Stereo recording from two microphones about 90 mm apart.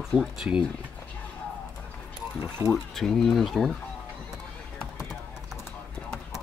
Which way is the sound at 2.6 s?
30° right (ahead or behind).